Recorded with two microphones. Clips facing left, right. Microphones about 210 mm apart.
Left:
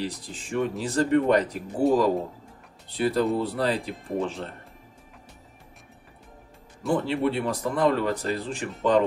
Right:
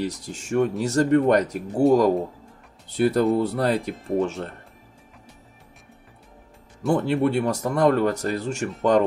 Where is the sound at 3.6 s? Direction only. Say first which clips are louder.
Right 3 dB; 50° right (ahead or behind).